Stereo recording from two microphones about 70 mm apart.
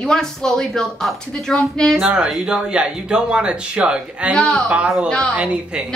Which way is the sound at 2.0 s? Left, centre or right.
Centre.